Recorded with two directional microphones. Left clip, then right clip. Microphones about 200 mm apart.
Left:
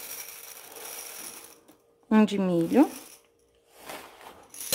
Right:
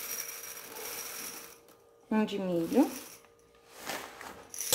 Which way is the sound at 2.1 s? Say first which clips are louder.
Left 7 dB; 50° left (ahead or behind).